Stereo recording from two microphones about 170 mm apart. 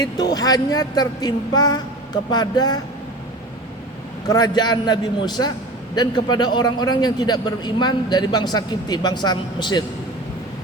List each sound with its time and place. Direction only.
0.0 s a man's voice: 25° left (ahead or behind)
4.3 s a man's voice: 25° left (ahead or behind)